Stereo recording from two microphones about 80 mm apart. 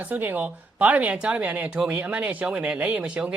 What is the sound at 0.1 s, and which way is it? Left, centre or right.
Speech, right.